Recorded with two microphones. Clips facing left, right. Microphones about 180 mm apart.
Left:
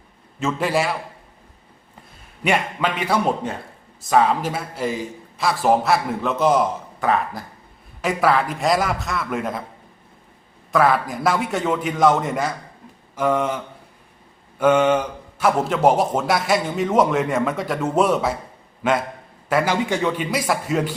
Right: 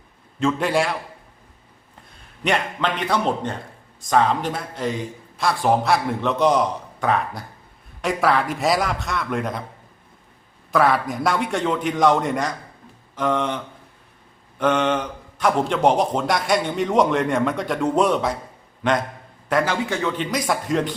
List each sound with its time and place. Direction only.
0.3 s a man's voice: 5° left (ahead or behind)
2.4 s a man's voice: 10° left (ahead or behind)
10.7 s a man's voice: centre (ahead or behind)
14.6 s a man's voice: 10° left (ahead or behind)